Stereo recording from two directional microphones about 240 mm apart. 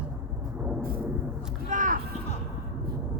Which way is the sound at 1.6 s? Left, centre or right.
Right.